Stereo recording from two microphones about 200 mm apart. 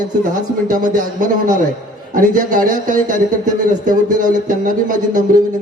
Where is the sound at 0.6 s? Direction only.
40° right (ahead or behind).